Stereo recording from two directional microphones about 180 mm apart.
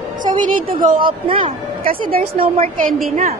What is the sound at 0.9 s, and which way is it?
Speech, 30° right (ahead or behind).